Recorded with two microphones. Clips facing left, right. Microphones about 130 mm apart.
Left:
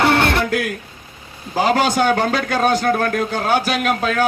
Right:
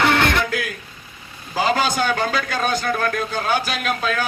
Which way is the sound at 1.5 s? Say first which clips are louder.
Left 3 dB; 60° left (ahead or behind).